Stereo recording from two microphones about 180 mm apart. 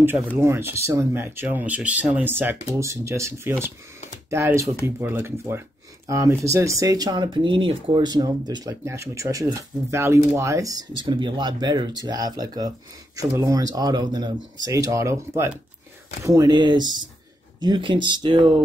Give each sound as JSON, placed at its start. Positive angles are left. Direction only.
{"t": 0.4, "sound": "speech", "side_deg": -15}